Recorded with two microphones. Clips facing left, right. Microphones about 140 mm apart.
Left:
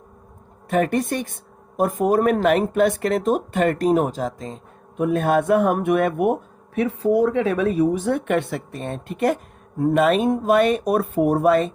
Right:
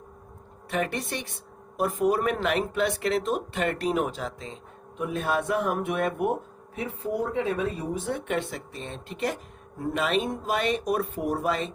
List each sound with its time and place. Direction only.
0.7 s speech: 45° left (ahead or behind)
6.7 s a woman's voice: 75° left (ahead or behind); by 11.7 s 55° left (ahead or behind)